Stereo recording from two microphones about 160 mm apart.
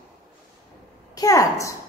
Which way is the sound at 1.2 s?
20° left (ahead or behind).